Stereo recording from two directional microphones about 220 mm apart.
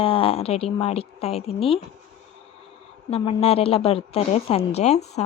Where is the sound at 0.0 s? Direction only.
25° left (ahead or behind).